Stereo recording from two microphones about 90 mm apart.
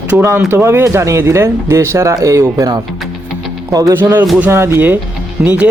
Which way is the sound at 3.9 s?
25° right (ahead or behind).